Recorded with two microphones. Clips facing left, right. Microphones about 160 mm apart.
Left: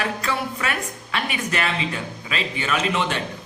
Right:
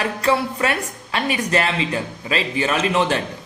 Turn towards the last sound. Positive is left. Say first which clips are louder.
# right 4 dB
turn(degrees=-35)  # may be behind; listen again after turning